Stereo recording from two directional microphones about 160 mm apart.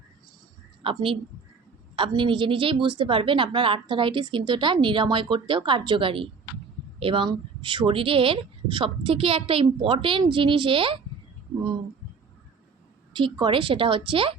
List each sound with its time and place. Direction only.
0.8 s a woman's voice: 35° right (ahead or behind)
13.1 s a woman's voice: 30° right (ahead or behind)